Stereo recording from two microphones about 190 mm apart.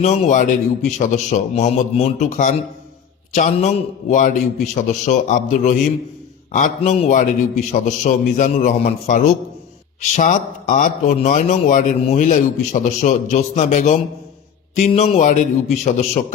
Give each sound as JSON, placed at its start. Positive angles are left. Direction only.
{"t": 0.0, "sound": "a man's voice", "side_deg": 40}